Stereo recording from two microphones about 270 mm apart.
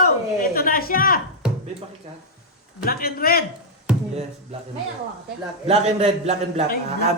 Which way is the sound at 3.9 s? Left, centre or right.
Centre.